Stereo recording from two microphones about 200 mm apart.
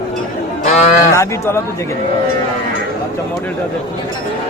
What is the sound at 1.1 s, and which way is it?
Speech, 15° left (ahead or behind).